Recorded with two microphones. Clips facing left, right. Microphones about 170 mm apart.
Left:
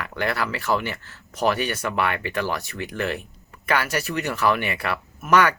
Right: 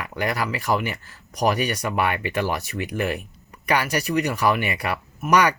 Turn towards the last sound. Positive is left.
turn(degrees=-15)  # may be behind; listen again after turning